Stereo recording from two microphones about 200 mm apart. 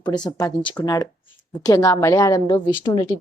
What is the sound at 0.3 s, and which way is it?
Speech, 15° left (ahead or behind).